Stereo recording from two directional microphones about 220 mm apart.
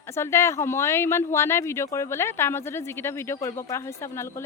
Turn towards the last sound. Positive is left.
turn(degrees=10)  # may be behind; listen again after turning